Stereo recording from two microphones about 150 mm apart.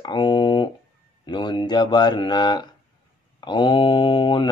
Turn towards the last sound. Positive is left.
turn(degrees=30)  # may be behind; listen again after turning